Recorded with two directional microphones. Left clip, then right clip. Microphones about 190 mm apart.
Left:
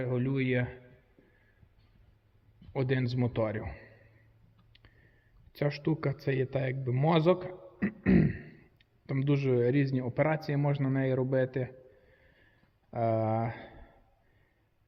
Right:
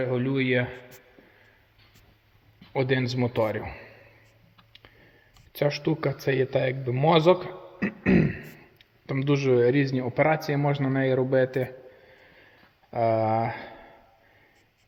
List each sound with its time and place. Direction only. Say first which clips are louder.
0.0 s speech: right 6 dB; 20° right (ahead or behind)
2.7 s a man's voice: right 7 dB; 15° right (ahead or behind)
5.5 s speech: right 7 dB; 15° right (ahead or behind)
12.9 s speech: right 7 dB; 15° right (ahead or behind)